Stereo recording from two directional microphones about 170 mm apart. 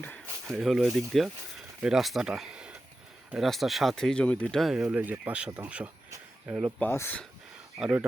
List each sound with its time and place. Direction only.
0.4 s speech: centre (ahead or behind)
6.7 s speech: 15° left (ahead or behind)
7.8 s speech: 10° right (ahead or behind)